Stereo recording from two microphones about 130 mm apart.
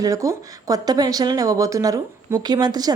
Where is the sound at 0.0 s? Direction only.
25° right (ahead or behind).